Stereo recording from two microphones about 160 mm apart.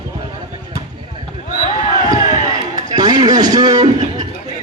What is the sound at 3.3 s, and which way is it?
Speech, 25° right (ahead or behind).